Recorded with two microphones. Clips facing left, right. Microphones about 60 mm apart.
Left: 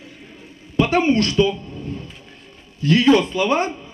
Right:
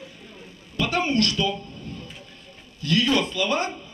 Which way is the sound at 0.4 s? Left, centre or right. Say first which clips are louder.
Left 8 dB; left.